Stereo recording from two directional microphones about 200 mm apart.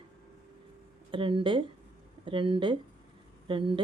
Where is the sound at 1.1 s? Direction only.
25° right (ahead or behind).